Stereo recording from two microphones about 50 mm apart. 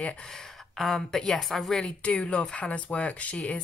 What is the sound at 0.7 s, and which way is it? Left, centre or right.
Speech, centre.